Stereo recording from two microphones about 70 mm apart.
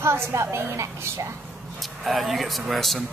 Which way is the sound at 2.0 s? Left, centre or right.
Centre.